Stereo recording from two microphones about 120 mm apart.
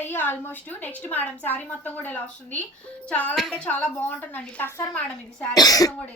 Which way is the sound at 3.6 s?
15° left (ahead or behind).